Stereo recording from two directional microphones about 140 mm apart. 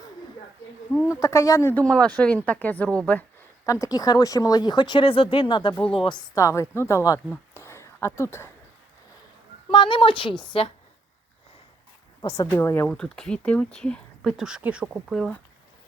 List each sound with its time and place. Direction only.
1.0 s speech: 20° left (ahead or behind)
1.7 s speech: 5° left (ahead or behind)
3.7 s speech: 25° left (ahead or behind)
6.3 s speech: 20° left (ahead or behind)
7.3 s a sound: 20° left (ahead or behind)
9.7 s speech: 35° left (ahead or behind)
12.5 s speech: 15° left (ahead or behind); by 15.4 s centre (ahead or behind)